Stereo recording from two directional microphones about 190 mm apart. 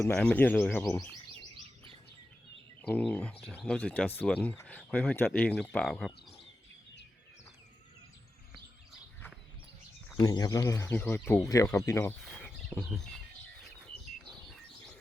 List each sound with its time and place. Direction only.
0.1 s speech: 5° left (ahead or behind)
2.8 s speech: 10° left (ahead or behind)
10.2 s speech: 20° left (ahead or behind); by 13.0 s 5° left (ahead or behind)